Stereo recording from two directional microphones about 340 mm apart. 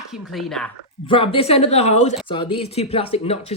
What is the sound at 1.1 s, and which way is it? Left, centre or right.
Speech, centre.